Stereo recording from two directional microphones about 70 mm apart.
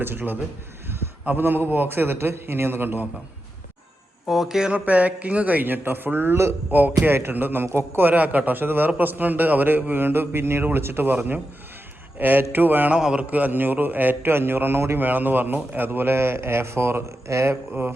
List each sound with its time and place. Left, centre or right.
0.0 s a man's voice: right
4.3 s speech: centre
4.9 s a man's voice: right
13.0 s a man's voice: centre; by 15.0 s right
15.0 s a man's voice: right